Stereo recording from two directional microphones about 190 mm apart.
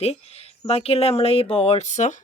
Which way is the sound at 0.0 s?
35° left (ahead or behind).